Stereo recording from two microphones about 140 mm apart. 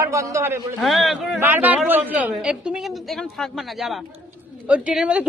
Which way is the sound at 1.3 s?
15° right (ahead or behind).